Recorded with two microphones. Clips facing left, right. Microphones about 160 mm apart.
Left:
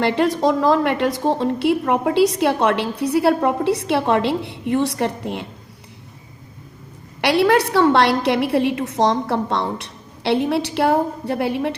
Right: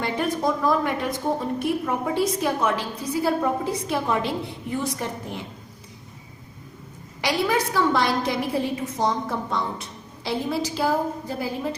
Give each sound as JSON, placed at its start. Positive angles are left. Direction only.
{"t": 0.0, "sound": "a woman's voice", "side_deg": 75}
{"t": 7.2, "sound": "a woman's voice", "side_deg": 70}